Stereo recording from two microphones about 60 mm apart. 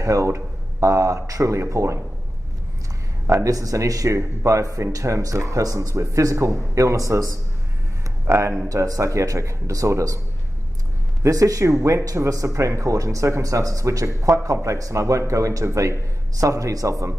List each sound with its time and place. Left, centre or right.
0.0 s speech: right
3.3 s speech: right
8.3 s speech: right
8.6 s speech: right
11.2 s speech: right